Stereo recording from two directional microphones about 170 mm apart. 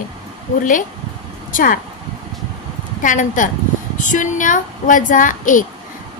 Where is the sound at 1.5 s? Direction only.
55° left (ahead or behind).